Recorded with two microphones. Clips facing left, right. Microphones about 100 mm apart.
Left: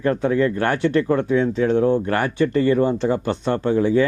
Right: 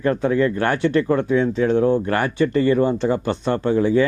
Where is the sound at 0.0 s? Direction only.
15° right (ahead or behind).